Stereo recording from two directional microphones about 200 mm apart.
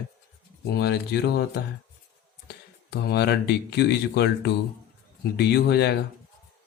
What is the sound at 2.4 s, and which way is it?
Speech, 55° left (ahead or behind).